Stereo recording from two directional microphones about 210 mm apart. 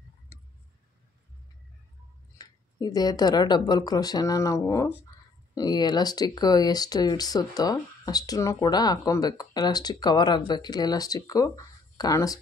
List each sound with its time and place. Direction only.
2.3 s speech: 20° left (ahead or behind)